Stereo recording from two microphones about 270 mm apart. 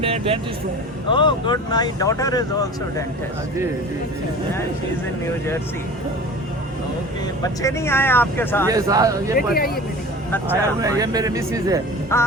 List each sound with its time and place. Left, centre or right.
0.0 s speech: right
1.1 s speech: centre
7.4 s speech: centre
8.7 s speech: centre
9.3 s speech: left
10.8 s speech: centre
12.1 s speech: centre